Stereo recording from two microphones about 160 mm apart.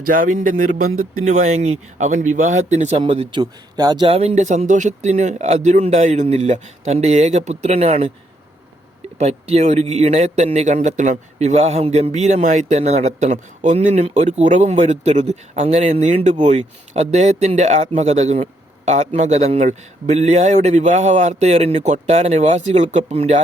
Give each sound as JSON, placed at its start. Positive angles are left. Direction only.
{"t": 0.0, "sound": "speech", "side_deg": -55}
{"t": 3.0, "sound": "speech", "side_deg": -30}
{"t": 4.0, "sound": "speech", "side_deg": -35}
{"t": 9.1, "sound": "speech", "side_deg": -40}